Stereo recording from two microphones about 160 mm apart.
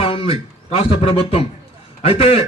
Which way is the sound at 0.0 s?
35° left (ahead or behind).